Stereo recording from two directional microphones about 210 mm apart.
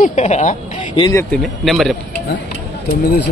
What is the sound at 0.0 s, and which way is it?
Speech, 35° left (ahead or behind).